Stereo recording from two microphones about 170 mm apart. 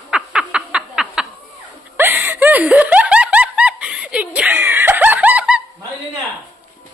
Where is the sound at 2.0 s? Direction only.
10° right (ahead or behind).